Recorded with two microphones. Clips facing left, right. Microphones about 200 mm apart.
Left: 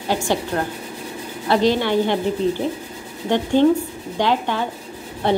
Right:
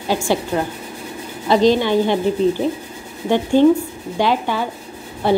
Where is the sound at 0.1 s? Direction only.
10° right (ahead or behind).